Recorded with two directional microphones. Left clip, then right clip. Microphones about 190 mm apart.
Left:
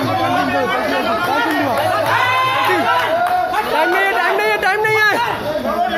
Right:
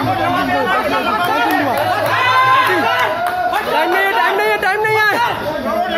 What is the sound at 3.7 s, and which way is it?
Chatter, 5° right (ahead or behind).